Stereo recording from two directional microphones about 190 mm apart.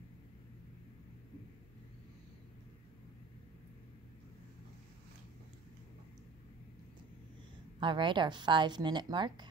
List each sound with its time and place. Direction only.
7.8 s a woman's voice: 25° right (ahead or behind)